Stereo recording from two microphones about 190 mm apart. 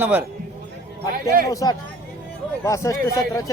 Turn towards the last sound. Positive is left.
turn(degrees=15)  # may be behind; listen again after turning